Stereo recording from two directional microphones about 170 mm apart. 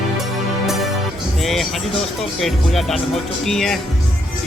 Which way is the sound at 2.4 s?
Centre (ahead or behind).